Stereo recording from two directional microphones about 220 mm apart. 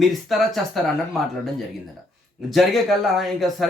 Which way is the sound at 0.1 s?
Centre (ahead or behind).